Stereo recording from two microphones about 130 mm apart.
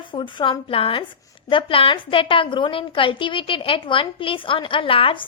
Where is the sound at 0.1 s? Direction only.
40° left (ahead or behind).